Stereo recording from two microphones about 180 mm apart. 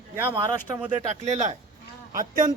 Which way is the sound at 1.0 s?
40° right (ahead or behind).